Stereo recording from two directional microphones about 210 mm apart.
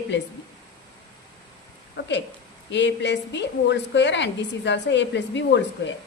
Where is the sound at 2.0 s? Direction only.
60° left (ahead or behind).